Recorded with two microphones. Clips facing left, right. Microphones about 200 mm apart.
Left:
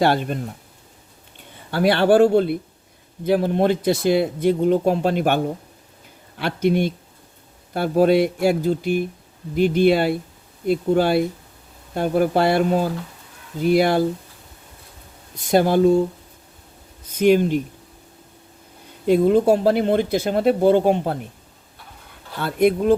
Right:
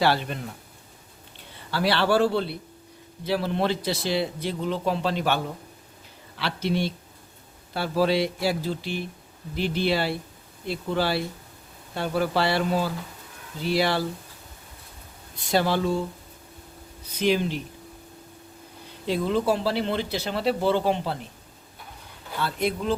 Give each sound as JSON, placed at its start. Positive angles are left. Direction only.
{"t": 0.0, "sound": "speech", "side_deg": 50}
{"t": 1.7, "sound": "speech", "side_deg": 50}
{"t": 15.4, "sound": "speech", "side_deg": 50}
{"t": 17.1, "sound": "speech", "side_deg": 50}
{"t": 19.0, "sound": "speech", "side_deg": 50}
{"t": 22.4, "sound": "speech", "side_deg": 50}